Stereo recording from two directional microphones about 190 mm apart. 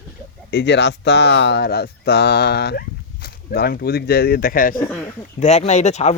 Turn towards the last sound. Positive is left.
turn(degrees=35)  # may be behind; listen again after turning